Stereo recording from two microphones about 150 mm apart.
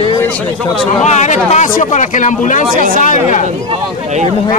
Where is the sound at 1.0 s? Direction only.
50° left (ahead or behind).